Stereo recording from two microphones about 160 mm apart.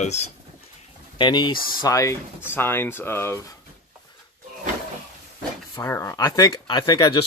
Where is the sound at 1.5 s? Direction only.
65° left (ahead or behind).